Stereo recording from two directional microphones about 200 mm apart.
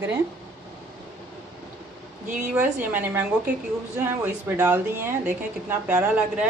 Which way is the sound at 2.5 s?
10° right (ahead or behind).